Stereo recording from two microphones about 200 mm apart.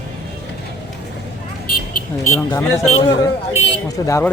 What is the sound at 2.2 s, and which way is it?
Speech, 15° left (ahead or behind).